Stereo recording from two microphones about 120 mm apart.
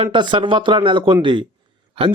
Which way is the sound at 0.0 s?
40° right (ahead or behind).